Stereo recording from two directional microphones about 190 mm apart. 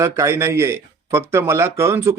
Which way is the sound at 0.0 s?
15° right (ahead or behind).